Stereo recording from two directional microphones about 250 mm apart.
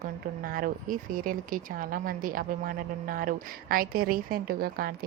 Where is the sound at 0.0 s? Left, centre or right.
Right.